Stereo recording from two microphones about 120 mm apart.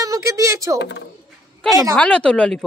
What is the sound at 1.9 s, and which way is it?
Speech, 10° left (ahead or behind).